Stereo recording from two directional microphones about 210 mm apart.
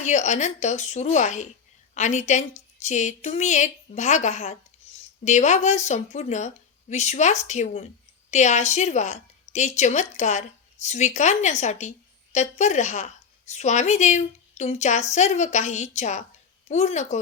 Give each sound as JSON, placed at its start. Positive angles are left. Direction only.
{"t": 0.0, "sound": "a woman's voice", "side_deg": 35}